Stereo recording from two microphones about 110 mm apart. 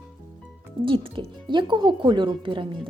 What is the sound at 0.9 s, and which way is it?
Speech, 50° right (ahead or behind).